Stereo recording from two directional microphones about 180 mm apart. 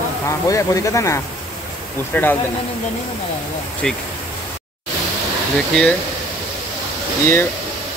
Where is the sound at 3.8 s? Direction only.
5° left (ahead or behind).